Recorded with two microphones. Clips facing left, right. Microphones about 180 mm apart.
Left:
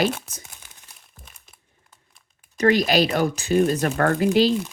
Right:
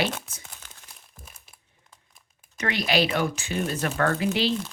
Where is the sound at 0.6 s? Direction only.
10° left (ahead or behind).